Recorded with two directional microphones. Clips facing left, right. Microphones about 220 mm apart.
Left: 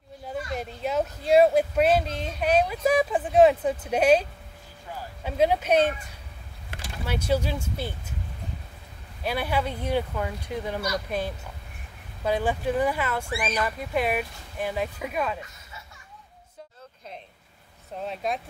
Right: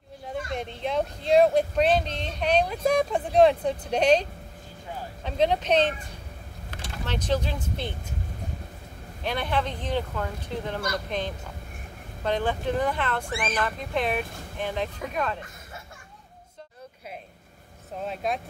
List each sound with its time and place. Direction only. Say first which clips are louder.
0.6 s speech: left 1 dB; 5° left (ahead or behind)
7.1 s speech: left 2 dB; 10° left (ahead or behind)
9.2 s speech: left 1 dB; 5° left (ahead or behind)
17.9 s speech: even; centre (ahead or behind)